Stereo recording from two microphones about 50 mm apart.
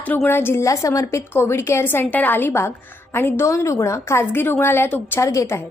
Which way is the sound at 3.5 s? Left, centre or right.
Left.